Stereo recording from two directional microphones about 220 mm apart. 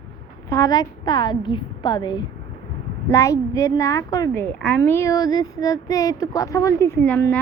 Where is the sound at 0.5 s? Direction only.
15° left (ahead or behind).